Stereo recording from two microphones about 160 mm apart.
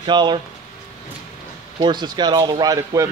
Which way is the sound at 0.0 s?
30° right (ahead or behind).